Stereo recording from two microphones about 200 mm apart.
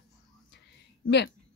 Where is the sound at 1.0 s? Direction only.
55° left (ahead or behind).